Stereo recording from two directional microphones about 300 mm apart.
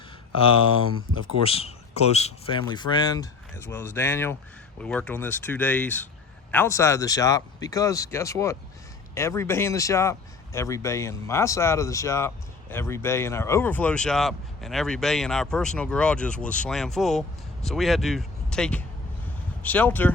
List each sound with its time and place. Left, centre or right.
0.3 s speech: centre